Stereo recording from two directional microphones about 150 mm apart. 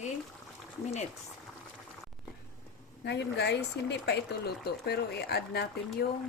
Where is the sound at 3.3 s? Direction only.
90° left.